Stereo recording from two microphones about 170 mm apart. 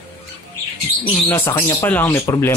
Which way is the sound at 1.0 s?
10° left (ahead or behind).